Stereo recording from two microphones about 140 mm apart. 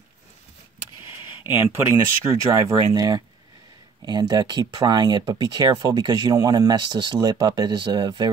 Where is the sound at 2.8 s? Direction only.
30° right (ahead or behind).